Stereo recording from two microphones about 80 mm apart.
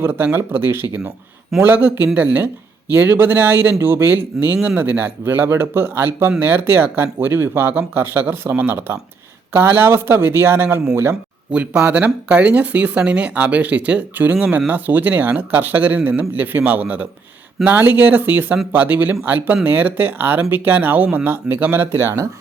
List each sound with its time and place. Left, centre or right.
0.0 s speech: right
11.1 s speech: centre; by 22.3 s right